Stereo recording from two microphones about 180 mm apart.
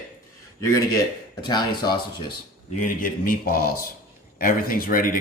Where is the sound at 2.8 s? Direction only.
50° left (ahead or behind).